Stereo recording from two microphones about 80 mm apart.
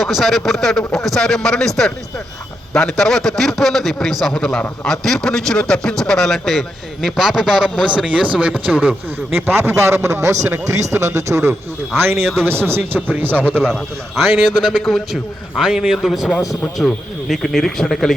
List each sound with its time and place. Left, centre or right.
0.0 s speech: centre
9.3 s a man's voice: right
13.5 s a man's voice: centre